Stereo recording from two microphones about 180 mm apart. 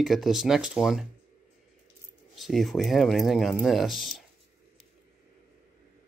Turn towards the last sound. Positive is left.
turn(degrees=0)  # may be behind; listen again after turning